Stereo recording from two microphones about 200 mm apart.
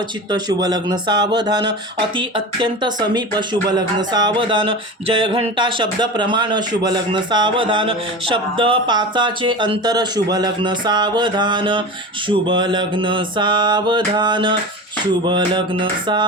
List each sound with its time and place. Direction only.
0.3 s speech: 20° right (ahead or behind)